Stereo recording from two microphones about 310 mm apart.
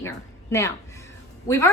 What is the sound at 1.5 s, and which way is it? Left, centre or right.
Speech, centre.